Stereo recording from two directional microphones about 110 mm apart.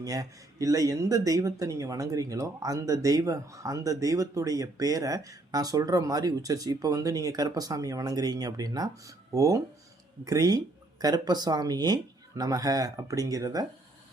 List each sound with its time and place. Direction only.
0.0 s speech: 35° right (ahead or behind)